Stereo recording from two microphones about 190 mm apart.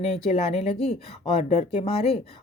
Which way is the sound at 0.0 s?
35° left (ahead or behind).